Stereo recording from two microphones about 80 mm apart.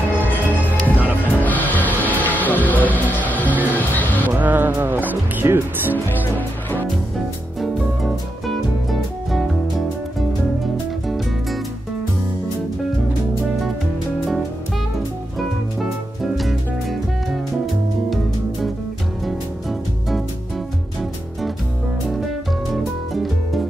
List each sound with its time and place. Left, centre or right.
0.2 s music: left
4.3 s music: right
6.0 s music: left
7.6 s music: centre
16.3 s music: centre
22.7 s music: centre